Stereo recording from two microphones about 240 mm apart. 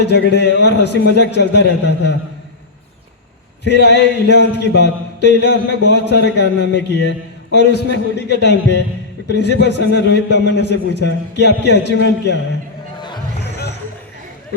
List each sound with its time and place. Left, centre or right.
0.0 s a man's voice: left
3.7 s a man's voice: left